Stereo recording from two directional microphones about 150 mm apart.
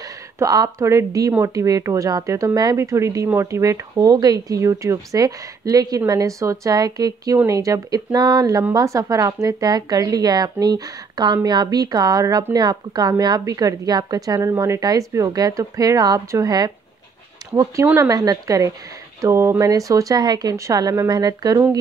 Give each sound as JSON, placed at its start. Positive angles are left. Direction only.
{"t": 0.4, "sound": "speech", "side_deg": -20}
{"t": 17.8, "sound": "speech", "side_deg": -20}